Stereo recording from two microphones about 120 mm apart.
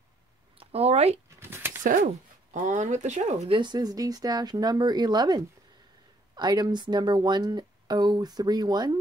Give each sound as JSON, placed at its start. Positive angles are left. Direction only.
{"t": 0.6, "sound": "speech", "side_deg": -55}
{"t": 1.4, "sound": "a sound", "side_deg": -20}
{"t": 1.8, "sound": "speech", "side_deg": -90}
{"t": 3.5, "sound": "speech", "side_deg": -35}